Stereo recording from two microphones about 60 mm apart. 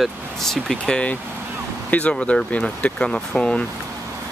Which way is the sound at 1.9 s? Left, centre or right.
Left.